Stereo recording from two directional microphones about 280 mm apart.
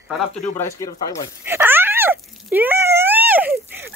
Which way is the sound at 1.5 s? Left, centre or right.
Centre.